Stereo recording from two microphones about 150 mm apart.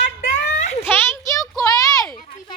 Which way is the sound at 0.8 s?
15° left (ahead or behind).